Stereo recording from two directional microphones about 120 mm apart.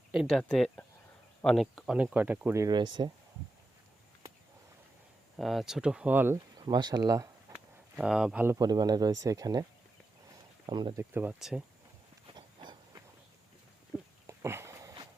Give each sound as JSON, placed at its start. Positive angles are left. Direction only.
{"t": 0.1, "sound": "speech", "side_deg": 0}
{"t": 2.1, "sound": "speech", "side_deg": -10}
{"t": 2.5, "sound": "speech", "side_deg": -25}
{"t": 2.7, "sound": "speech", "side_deg": -40}
{"t": 5.4, "sound": "speech", "side_deg": 0}
{"t": 6.7, "sound": "speech", "side_deg": -35}
{"t": 7.5, "sound": "a sound", "side_deg": -5}
{"t": 8.5, "sound": "speech", "side_deg": -35}
{"t": 10.7, "sound": "speech", "side_deg": -40}
{"t": 10.9, "sound": "speech", "side_deg": -15}
{"t": 11.3, "sound": "speech", "side_deg": -5}
{"t": 12.4, "sound": "a sound", "side_deg": -40}
{"t": 13.9, "sound": "a sound", "side_deg": -15}
{"t": 14.3, "sound": "sniff", "side_deg": -20}